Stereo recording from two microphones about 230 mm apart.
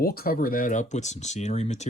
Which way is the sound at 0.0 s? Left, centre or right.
Left.